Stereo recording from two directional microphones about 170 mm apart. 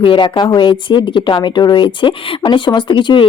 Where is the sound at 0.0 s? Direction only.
30° left (ahead or behind).